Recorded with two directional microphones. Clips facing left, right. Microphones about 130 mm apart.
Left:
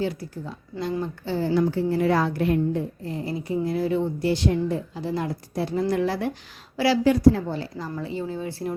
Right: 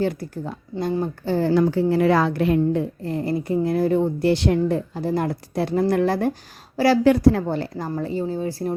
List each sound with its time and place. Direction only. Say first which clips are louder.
0.0 s a woman's voice: right 4 dB; 55° right (ahead or behind)
7.9 s a woman's voice: right 5 dB; 45° right (ahead or behind)